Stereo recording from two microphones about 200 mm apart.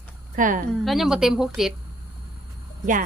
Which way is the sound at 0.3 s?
40° right (ahead or behind).